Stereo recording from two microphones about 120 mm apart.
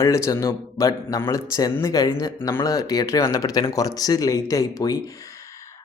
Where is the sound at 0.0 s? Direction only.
25° left (ahead or behind).